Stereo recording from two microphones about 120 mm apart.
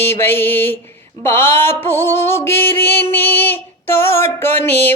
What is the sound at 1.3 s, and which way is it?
Mantra, 20° left (ahead or behind).